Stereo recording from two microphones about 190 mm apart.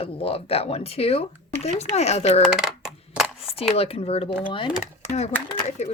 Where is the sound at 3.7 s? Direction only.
30° left (ahead or behind).